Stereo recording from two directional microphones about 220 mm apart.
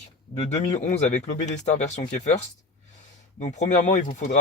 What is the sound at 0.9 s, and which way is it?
Speech, 35° left (ahead or behind).